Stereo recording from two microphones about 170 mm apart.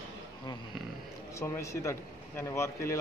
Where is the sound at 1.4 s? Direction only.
15° left (ahead or behind).